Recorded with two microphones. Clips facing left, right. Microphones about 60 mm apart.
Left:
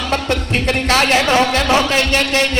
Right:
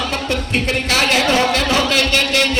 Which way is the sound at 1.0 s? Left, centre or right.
Left.